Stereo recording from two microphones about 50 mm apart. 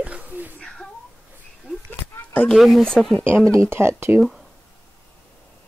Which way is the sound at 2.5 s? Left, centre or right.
Centre.